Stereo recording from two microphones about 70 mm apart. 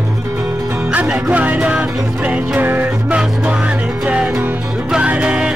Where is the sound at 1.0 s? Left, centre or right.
Centre.